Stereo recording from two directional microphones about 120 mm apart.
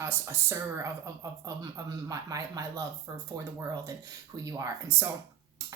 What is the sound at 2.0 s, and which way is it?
Speech, 30° right (ahead or behind).